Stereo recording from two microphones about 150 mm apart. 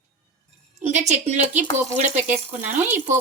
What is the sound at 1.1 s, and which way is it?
Speech, 50° right (ahead or behind).